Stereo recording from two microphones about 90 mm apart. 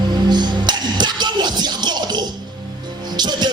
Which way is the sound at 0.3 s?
55° right (ahead or behind).